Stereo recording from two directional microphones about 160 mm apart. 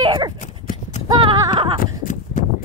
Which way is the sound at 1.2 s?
30° right (ahead or behind).